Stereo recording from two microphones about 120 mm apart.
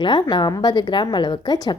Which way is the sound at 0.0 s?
40° left (ahead or behind).